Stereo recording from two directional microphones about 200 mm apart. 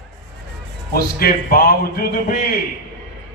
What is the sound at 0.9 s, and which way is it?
Speech, 45° left (ahead or behind).